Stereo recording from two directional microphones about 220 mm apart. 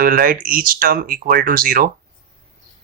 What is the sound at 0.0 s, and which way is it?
Speech, 40° right (ahead or behind).